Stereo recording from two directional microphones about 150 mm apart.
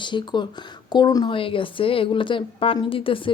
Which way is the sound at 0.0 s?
30° left (ahead or behind).